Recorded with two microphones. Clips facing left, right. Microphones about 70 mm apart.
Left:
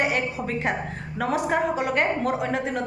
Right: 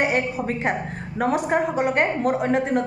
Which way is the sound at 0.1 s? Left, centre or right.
Right.